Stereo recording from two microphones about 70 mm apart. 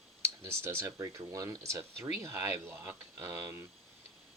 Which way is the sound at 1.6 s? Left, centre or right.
Right.